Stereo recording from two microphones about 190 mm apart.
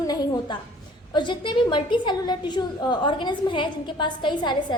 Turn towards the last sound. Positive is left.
turn(degrees=25)  # may be behind; listen again after turning